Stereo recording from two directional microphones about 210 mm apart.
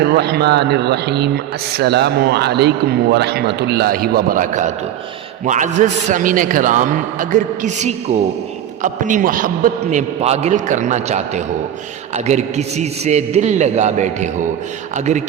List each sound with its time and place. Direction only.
0.0 s a man's voice: 50° right (ahead or behind); by 15.2 s 35° right (ahead or behind)